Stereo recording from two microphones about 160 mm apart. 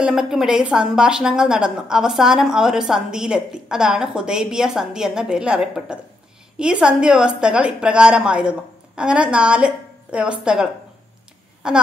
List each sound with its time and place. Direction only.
0.0 s a woman's voice: 5° right (ahead or behind)